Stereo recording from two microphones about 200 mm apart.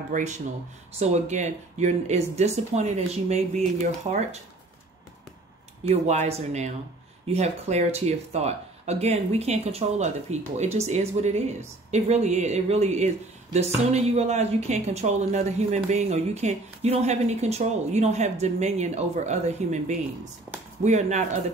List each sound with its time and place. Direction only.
0.1 s speech: 35° right (ahead or behind)
5.9 s speech: 30° right (ahead or behind)